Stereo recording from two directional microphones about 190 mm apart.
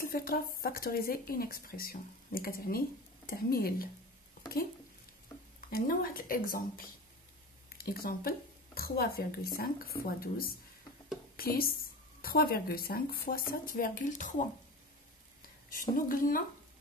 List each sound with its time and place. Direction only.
0.0 s speech: 50° left (ahead or behind)
5.7 s speech: 50° left (ahead or behind)
7.7 s speech: 55° left (ahead or behind)
16.1 s speech: 45° left (ahead or behind)